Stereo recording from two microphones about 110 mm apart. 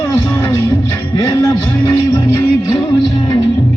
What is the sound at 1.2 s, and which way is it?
Music, 30° left (ahead or behind).